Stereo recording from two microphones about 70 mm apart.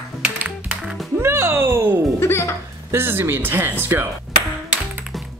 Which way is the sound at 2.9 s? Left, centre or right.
Right.